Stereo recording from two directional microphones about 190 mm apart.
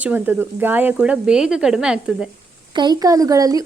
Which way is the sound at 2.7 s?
20° right (ahead or behind).